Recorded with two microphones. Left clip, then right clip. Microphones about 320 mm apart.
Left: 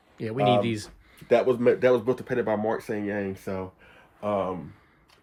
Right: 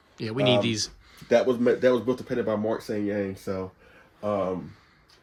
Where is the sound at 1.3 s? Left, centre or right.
Centre.